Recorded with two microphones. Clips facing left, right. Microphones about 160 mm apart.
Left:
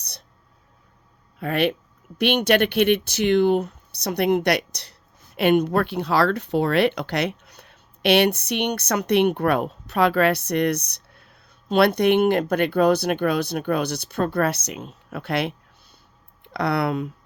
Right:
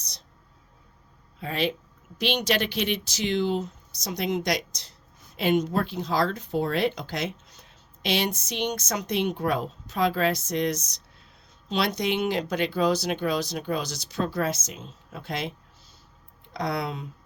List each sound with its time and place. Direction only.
0.0 s whispering: 60° left (ahead or behind)
1.4 s speech: 60° left (ahead or behind)